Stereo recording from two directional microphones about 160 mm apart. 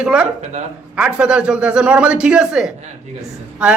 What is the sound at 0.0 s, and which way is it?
A man's voice, 5° right (ahead or behind).